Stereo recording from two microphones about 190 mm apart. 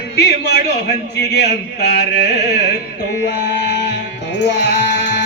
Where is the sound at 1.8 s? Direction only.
60° left (ahead or behind).